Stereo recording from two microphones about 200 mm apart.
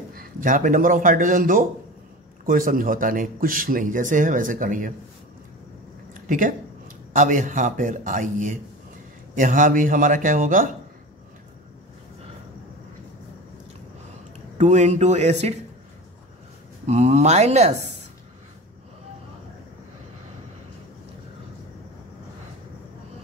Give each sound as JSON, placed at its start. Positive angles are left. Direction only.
{"t": 0.1, "sound": "a man's voice", "side_deg": -45}
{"t": 6.2, "sound": "a man's voice", "side_deg": -40}
{"t": 14.6, "sound": "a man's voice", "side_deg": -35}
{"t": 16.8, "sound": "a man's voice", "side_deg": -35}